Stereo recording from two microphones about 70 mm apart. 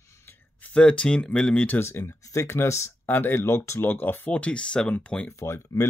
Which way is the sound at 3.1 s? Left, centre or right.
Left.